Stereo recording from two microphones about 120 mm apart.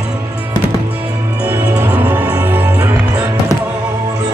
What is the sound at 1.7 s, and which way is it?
Music, 15° right (ahead or behind).